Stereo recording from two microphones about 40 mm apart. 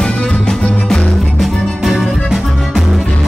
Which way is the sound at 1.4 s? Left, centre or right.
Centre.